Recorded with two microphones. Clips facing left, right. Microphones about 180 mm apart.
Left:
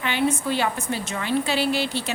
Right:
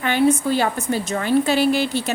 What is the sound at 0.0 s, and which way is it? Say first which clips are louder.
A woman's voice: right 6 dB; 45° right (ahead or behind).